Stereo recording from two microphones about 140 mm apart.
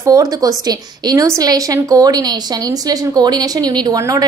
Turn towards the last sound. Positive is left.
turn(degrees=-25)  # may be behind; listen again after turning